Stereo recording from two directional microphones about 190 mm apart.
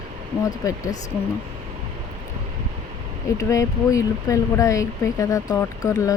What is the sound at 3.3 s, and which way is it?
Speech, 15° left (ahead or behind).